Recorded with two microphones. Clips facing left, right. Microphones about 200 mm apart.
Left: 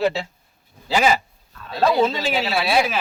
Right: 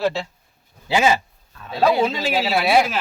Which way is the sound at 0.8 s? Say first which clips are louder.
Right 1 dB; 20° right (ahead or behind).